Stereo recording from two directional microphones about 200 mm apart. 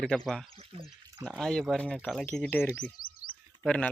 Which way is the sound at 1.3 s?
5° left (ahead or behind).